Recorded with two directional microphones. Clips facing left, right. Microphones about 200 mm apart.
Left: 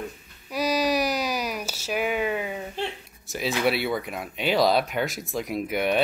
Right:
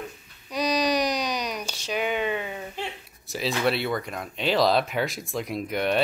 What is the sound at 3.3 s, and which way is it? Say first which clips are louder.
Speech: left 1 dB; centre (ahead or behind).